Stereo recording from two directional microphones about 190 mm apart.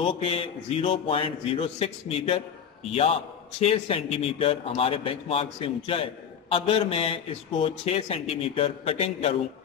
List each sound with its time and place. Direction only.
0.0 s a man's voice: 30° left (ahead or behind)